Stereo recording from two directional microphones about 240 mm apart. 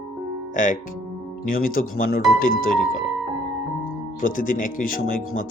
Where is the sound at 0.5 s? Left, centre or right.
Left.